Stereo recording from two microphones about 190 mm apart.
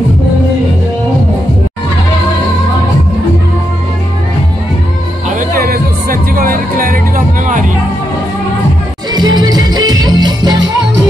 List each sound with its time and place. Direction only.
5.3 s music: 50° right (ahead or behind)
9.1 s music: 25° right (ahead or behind)